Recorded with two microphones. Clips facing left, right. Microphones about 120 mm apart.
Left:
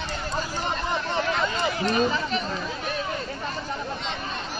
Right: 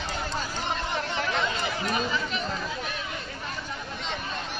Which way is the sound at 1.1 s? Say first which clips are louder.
Left 3 dB; 40° left (ahead or behind).